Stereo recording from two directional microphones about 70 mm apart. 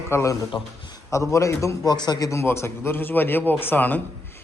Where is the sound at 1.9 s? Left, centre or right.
Left.